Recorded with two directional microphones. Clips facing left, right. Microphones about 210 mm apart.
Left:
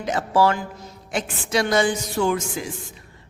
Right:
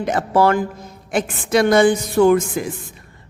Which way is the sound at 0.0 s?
55° right (ahead or behind).